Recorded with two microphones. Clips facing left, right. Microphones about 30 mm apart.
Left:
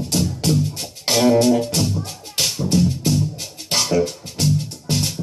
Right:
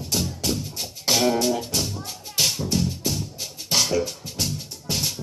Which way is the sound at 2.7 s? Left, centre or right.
Centre.